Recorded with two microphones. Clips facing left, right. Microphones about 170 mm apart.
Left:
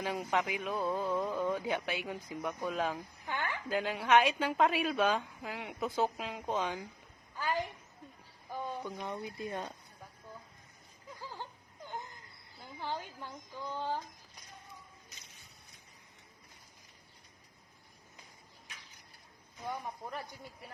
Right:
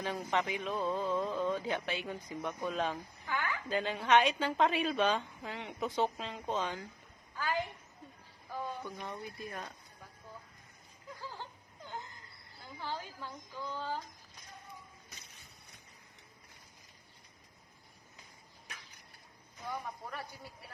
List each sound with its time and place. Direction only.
0.0 s a woman's voice: 10° left (ahead or behind)
3.2 s speech: 25° left (ahead or behind)
3.7 s a woman's voice: 5° left (ahead or behind)
7.3 s a sound: 15° left (ahead or behind)
8.5 s speech: 15° left (ahead or behind)
12.8 s a woman's voice: 15° left (ahead or behind)